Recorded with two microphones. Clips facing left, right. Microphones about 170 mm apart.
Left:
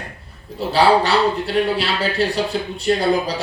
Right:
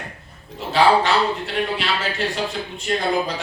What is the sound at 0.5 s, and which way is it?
A man's voice, 35° left (ahead or behind).